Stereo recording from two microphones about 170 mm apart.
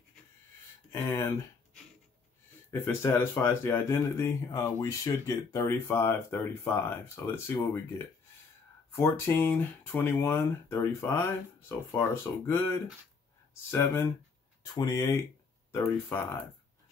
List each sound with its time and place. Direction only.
0.9 s speech: 15° left (ahead or behind)
2.7 s speech: 15° left (ahead or behind)